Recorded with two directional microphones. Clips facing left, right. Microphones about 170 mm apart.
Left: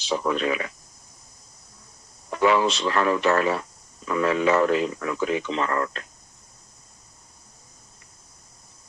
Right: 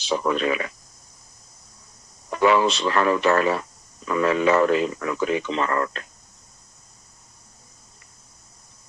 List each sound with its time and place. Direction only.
0.0 s speech: 65° right (ahead or behind)
2.4 s speech: 65° right (ahead or behind)